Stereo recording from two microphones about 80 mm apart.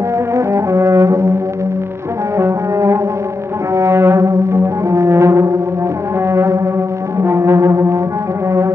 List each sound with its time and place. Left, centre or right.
0.3 s brass instrument: right
2.3 s music: right
3.7 s brass instrument: right